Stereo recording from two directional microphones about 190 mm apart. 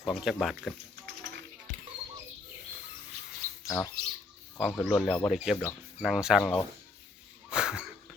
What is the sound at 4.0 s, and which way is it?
Speech, 55° right (ahead or behind).